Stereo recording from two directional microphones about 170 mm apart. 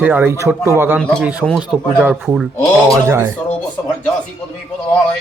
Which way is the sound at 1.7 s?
Centre (ahead or behind).